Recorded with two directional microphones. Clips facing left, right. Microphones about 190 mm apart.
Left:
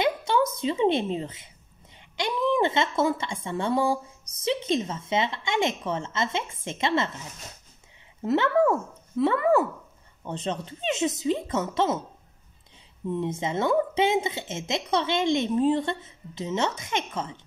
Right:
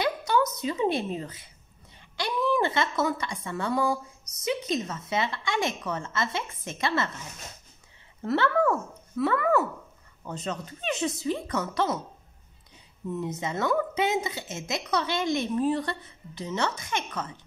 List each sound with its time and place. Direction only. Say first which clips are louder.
0.0 s a woman's voice: left 2 dB; 25° left (ahead or behind)
2.0 s a sound: left 1 dB; 20° left (ahead or behind)
3.4 s speech: left 2 dB; 25° left (ahead or behind)
8.2 s speech: left 3 dB; 20° left (ahead or behind)
13.1 s speech: left 3 dB; 25° left (ahead or behind)